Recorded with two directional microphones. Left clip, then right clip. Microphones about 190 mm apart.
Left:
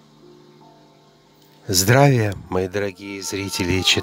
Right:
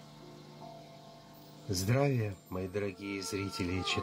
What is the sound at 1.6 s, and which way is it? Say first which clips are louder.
Speech: left 16 dB; 50° left (ahead or behind).